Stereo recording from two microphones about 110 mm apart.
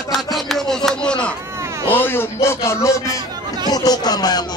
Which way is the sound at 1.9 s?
20° left (ahead or behind).